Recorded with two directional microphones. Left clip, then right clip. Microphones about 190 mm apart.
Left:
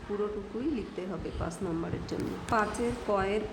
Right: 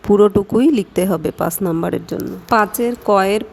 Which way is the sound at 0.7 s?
60° right (ahead or behind).